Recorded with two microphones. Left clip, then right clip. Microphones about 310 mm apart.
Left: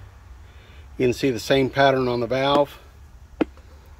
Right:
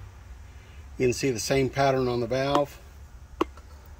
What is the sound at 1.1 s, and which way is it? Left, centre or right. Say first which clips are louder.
Speech: left 5 dB; left.